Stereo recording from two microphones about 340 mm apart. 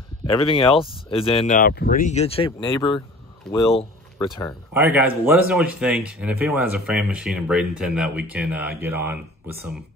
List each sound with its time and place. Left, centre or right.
0.2 s speech: centre
4.7 s speech: centre